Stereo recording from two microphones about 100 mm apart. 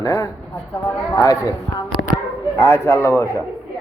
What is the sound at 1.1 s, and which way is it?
Speech, 35° left (ahead or behind).